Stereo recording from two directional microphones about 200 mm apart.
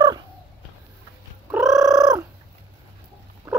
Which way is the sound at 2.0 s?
20° right (ahead or behind).